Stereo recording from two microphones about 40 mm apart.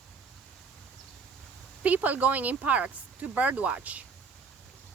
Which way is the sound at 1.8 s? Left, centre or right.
Right.